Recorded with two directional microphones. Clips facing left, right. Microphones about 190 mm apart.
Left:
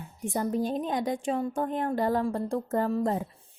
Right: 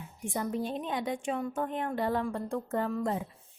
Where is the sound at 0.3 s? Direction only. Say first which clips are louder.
Left 5 dB; 40° left (ahead or behind).